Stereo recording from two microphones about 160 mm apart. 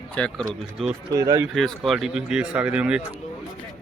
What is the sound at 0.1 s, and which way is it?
Speech, 5° left (ahead or behind).